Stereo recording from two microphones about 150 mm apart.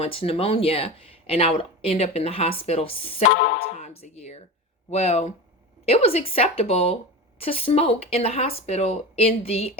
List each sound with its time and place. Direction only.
0.0 s speech: 40° left (ahead or behind)
3.3 s speech: 90° left
3.8 s speech: 45° left (ahead or behind)